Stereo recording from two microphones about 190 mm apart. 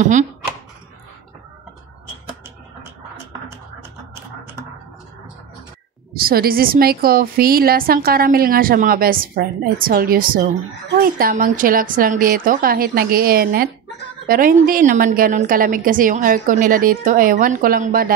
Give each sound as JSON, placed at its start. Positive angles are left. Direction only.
{"t": 0.0, "sound": "speech", "side_deg": -40}
{"t": 6.1, "sound": "a woman's voice", "side_deg": -50}